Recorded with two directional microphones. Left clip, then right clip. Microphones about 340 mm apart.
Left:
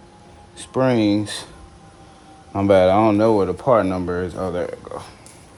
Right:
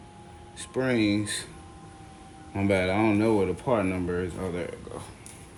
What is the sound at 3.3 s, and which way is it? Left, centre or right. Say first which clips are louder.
Speech: left 9 dB; left.